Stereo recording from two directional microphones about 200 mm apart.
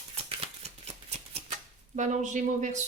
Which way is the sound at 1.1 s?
35° right (ahead or behind).